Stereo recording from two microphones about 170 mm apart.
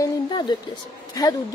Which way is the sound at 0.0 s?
25° left (ahead or behind).